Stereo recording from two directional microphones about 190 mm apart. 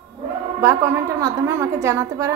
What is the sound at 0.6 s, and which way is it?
A woman's voice, 15° right (ahead or behind).